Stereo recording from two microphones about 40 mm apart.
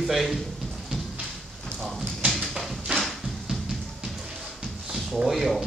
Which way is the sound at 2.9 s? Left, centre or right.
Right.